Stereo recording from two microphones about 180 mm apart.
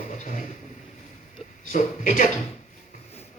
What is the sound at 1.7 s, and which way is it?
Speech, 45° left (ahead or behind).